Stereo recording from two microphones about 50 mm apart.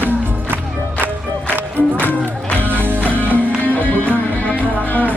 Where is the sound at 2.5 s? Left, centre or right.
Left.